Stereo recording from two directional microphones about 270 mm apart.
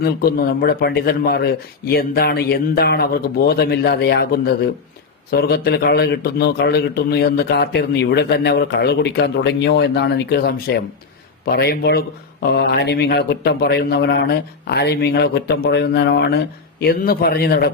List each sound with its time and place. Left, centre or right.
0.0 s a man's voice: left